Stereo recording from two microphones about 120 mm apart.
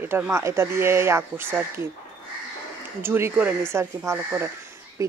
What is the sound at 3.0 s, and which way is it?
Speech, 20° right (ahead or behind).